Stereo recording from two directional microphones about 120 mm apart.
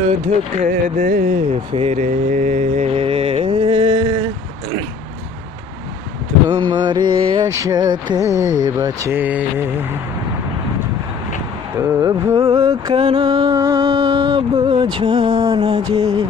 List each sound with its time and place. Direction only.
0.6 s a sound: 80° right
1.7 s speech: 55° right (ahead or behind)
2.0 s mantra: 90° right
2.9 s music: 55° right (ahead or behind)
6.5 s mantra: 40° right (ahead or behind)
7.5 s speech: 30° right (ahead or behind)
9.2 s mantra: 15° right (ahead or behind)
11.8 s speech: 25° right (ahead or behind)
12.5 s mantra: 30° right (ahead or behind)
12.9 s a sound: 45° right (ahead or behind)
14.5 s music: 45° right (ahead or behind)
14.8 s mantra: 40° right (ahead or behind)